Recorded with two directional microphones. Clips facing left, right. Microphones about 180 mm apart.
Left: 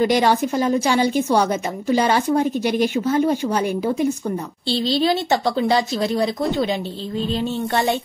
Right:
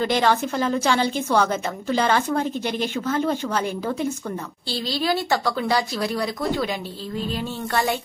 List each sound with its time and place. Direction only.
0.0 s a woman's voice: 15° left (ahead or behind)
4.6 s speech: 25° left (ahead or behind)